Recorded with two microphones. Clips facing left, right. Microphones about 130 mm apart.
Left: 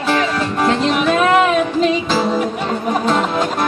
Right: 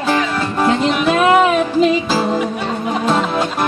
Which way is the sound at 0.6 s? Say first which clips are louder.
Right 1 dB; 5° right (ahead or behind).